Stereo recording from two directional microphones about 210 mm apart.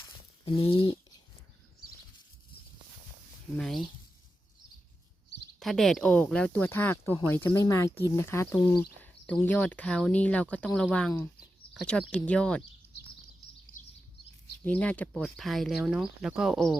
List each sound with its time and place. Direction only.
0.4 s a sound: 25° left (ahead or behind)
3.6 s speech: centre (ahead or behind)
5.5 s speech: centre (ahead or behind)
11.1 s speech: 15° left (ahead or behind)
11.7 s speech: centre (ahead or behind)
14.6 s speech: 5° left (ahead or behind)